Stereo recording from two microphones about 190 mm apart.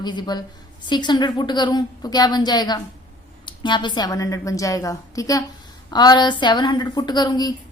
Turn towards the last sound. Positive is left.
turn(degrees=20)  # may be behind; listen again after turning